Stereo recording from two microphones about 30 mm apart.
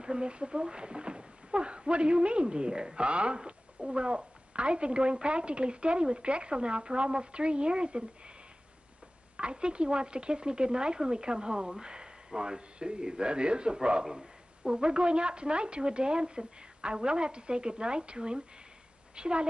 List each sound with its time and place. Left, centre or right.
0.0 s a woman's voice: right
9.4 s a woman's voice: right
11.8 s a sound: right
12.4 s a woman's voice: right